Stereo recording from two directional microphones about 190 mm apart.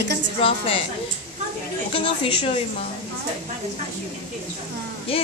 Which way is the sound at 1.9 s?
25° left (ahead or behind).